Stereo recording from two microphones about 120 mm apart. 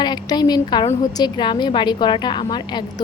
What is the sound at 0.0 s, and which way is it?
Speech, 35° left (ahead or behind).